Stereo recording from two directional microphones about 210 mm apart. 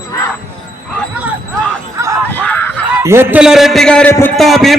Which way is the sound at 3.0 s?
10° right (ahead or behind).